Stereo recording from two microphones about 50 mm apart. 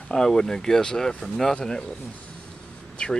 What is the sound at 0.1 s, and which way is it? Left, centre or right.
Speech, centre.